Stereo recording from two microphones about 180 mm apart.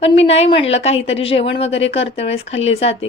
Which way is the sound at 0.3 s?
35° left (ahead or behind).